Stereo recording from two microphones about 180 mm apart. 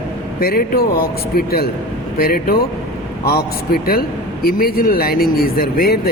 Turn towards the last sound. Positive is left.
turn(degrees=60)  # may be behind; listen again after turning